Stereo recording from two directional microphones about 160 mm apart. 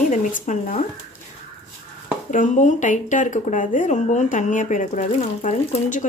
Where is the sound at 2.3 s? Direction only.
50° left (ahead or behind).